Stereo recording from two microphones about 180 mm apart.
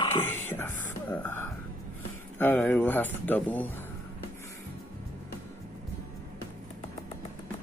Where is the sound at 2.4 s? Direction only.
10° left (ahead or behind).